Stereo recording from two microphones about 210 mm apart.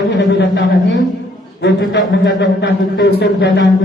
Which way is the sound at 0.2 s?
55° left (ahead or behind).